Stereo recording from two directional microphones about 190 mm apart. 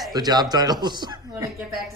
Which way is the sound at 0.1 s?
20° right (ahead or behind).